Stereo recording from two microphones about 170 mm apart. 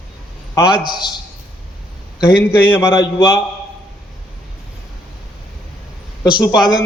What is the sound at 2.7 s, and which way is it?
Speech, 15° left (ahead or behind).